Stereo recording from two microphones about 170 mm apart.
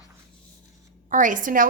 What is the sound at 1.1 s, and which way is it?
Speech, 50° right (ahead or behind).